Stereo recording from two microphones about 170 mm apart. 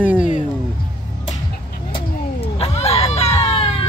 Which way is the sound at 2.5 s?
35° left (ahead or behind).